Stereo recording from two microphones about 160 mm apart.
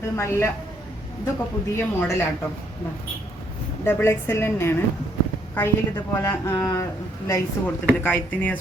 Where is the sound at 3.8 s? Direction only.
15° left (ahead or behind).